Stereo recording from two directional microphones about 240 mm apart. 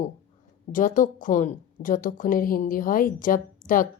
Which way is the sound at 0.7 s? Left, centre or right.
Left.